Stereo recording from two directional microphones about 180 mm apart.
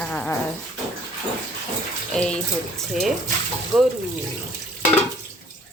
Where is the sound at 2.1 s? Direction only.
5° left (ahead or behind).